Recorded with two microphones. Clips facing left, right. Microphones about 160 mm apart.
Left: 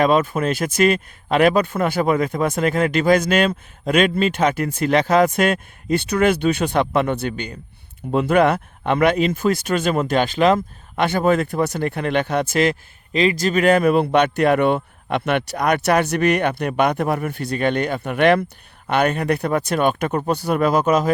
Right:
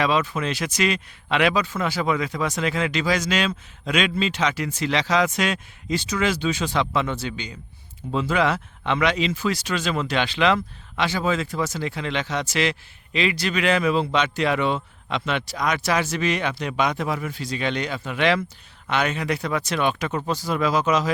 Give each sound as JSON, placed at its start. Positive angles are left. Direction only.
{"t": 0.0, "sound": "speech", "side_deg": 50}